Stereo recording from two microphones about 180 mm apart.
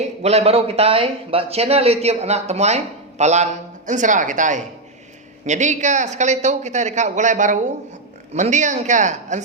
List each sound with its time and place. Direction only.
0.0 s speech: 35° right (ahead or behind)